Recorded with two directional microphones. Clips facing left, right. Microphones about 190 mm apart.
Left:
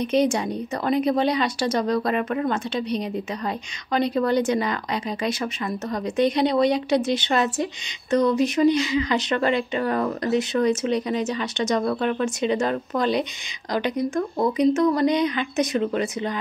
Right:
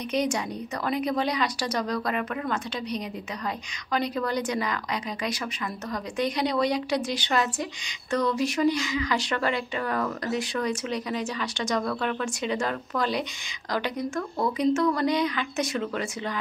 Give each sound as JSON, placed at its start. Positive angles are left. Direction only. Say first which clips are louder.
{"t": 0.0, "sound": "speech", "louder": "left 6 dB", "side_deg": 25}